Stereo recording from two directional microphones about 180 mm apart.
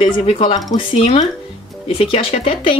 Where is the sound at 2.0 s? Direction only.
30° left (ahead or behind).